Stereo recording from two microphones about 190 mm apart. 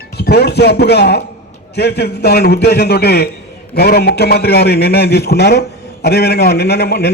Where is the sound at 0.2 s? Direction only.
60° left (ahead or behind).